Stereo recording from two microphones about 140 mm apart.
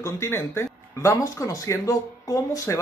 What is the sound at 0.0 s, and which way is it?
Speech, 20° left (ahead or behind).